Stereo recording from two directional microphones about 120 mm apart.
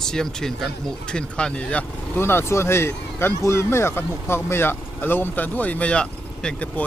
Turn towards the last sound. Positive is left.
turn(degrees=10)  # may be behind; listen again after turning